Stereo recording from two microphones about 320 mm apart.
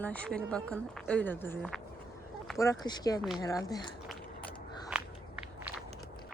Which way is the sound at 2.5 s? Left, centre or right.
Centre.